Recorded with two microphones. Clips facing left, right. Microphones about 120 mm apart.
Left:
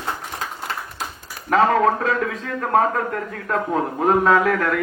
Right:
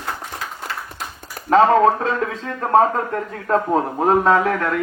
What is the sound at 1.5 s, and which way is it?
A man's voice, 30° right (ahead or behind).